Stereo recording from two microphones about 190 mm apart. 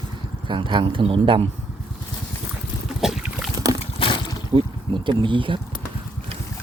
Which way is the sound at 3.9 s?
25° left (ahead or behind).